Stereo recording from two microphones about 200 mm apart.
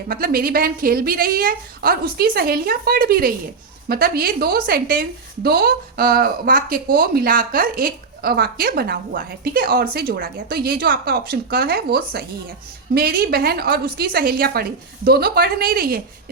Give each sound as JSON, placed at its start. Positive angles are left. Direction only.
{"t": 0.1, "sound": "speech", "side_deg": -45}